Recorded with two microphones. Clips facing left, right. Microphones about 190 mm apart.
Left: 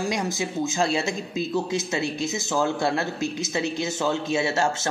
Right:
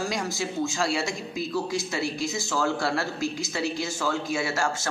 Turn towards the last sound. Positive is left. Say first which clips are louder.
# left 4 dB
turn(degrees=25)  # may be behind; listen again after turning